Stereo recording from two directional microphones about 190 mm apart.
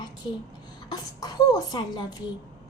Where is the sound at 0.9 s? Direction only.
20° left (ahead or behind).